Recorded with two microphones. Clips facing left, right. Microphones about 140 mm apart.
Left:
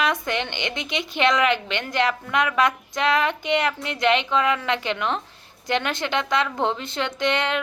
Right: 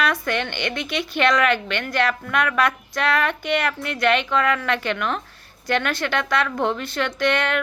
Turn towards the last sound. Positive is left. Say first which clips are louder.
# right 2 dB
turn(degrees=20)  # may be behind; listen again after turning